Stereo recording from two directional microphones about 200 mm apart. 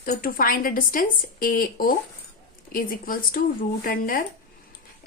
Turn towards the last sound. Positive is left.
turn(degrees=45)  # may be behind; listen again after turning